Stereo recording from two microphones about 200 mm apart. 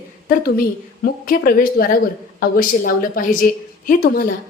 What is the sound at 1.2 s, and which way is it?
A woman's voice, 45° left (ahead or behind).